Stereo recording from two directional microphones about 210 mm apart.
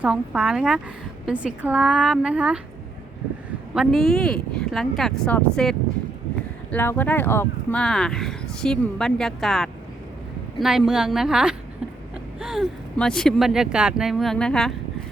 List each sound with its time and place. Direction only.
0.0 s speech: 5° right (ahead or behind)
3.8 s speech: centre (ahead or behind)